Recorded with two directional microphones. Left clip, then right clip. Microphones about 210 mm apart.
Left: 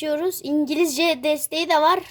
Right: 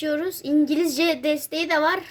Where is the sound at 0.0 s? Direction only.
45° left (ahead or behind).